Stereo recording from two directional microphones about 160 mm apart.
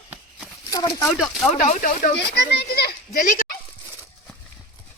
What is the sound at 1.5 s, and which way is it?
Speech, 50° left (ahead or behind).